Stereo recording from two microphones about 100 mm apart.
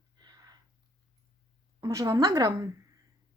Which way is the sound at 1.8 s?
35° right (ahead or behind).